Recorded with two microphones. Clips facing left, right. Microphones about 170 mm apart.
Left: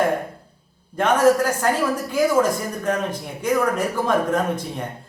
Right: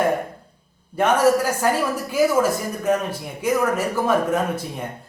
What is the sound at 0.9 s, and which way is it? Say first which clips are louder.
Speech: left 1 dB; 10° right (ahead or behind).